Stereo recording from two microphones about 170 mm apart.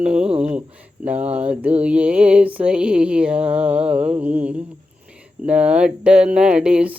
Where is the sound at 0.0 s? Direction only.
5° right (ahead or behind).